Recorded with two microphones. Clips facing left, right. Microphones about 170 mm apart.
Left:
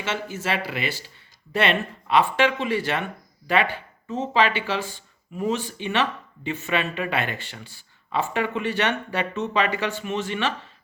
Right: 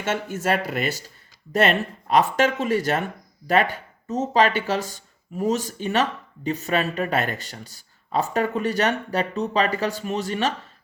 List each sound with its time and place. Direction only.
0.0 s speech: 50° right (ahead or behind)